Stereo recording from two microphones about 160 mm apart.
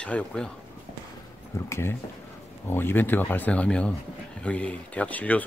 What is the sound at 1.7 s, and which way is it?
Speech, 15° left (ahead or behind).